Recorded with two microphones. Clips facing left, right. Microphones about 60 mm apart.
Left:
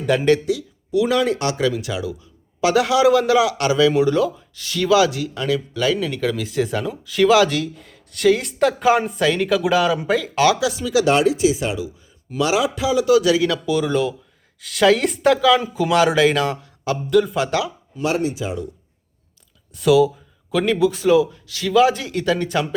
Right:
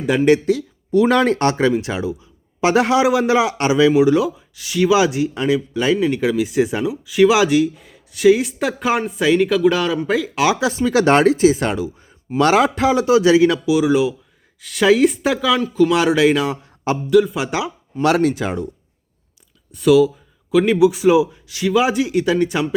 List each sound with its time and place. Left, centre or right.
0.1 s speech: centre
0.4 s speech: right; by 10.5 s centre
10.5 s speech: right
13.1 s speech: right
13.7 s speech: centre
15.6 s speech: centre
16.6 s a sound: right
17.1 s speech: centre
18.0 s speech: right
19.7 s speech: centre